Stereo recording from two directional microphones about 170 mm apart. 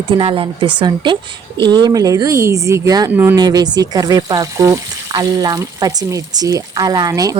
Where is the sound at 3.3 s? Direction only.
25° right (ahead or behind).